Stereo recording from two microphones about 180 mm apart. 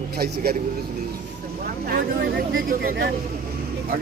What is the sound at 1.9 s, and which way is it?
Speech, 55° right (ahead or behind).